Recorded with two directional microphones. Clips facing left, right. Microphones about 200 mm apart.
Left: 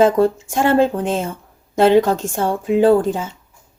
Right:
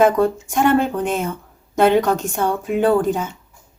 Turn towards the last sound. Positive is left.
turn(degrees=25)  # may be behind; listen again after turning